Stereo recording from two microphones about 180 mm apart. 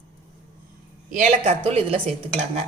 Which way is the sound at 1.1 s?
45° right (ahead or behind).